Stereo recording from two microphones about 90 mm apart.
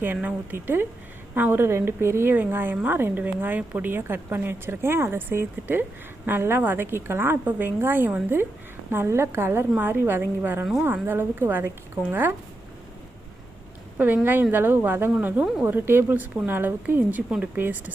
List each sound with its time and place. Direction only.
0.0 s a woman's voice: 20° right (ahead or behind)
14.5 s a woman's voice: 25° right (ahead or behind)